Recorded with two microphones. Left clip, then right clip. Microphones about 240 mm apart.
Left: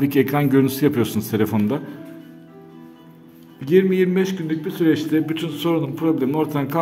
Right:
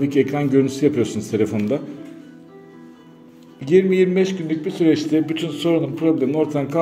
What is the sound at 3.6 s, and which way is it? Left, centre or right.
A man's voice, centre.